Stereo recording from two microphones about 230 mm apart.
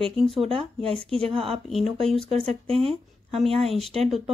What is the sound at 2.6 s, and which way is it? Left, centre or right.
Speech, right.